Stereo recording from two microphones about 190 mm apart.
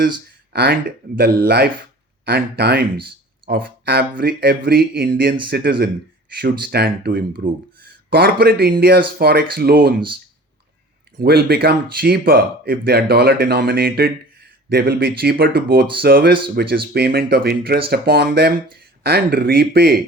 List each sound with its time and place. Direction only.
0.5 s speech: 50° right (ahead or behind)
11.2 s speech: 55° right (ahead or behind)